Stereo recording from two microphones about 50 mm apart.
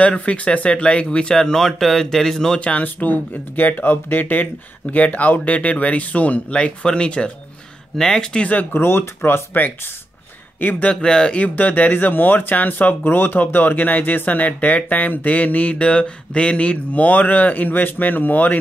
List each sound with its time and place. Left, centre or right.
0.0 s speech: left; by 2.6 s centre
2.8 s speech: left
4.9 s speech: left
8.5 s speech: left
8.8 s speech: left
10.9 s speech: centre
11.3 s speech: left